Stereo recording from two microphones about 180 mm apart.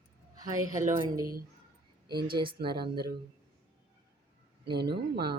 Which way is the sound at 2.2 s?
30° right (ahead or behind).